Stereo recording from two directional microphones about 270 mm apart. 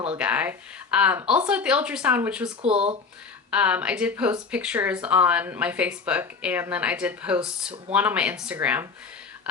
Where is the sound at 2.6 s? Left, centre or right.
Right.